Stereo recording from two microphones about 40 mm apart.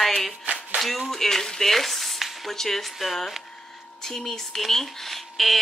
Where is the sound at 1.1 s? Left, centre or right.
Centre.